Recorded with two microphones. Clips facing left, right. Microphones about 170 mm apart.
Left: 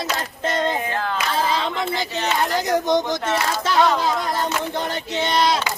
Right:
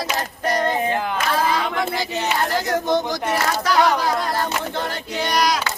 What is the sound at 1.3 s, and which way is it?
Speech, 25° left (ahead or behind).